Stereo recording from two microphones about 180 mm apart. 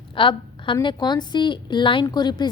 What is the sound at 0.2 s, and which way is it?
A woman's voice, 25° left (ahead or behind).